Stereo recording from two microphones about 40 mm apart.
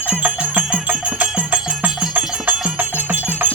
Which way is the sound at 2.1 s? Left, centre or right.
Right.